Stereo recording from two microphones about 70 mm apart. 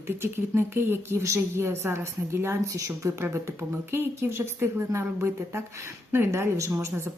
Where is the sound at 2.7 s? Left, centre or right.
Right.